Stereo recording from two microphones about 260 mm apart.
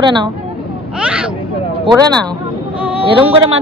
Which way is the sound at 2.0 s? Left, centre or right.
Centre.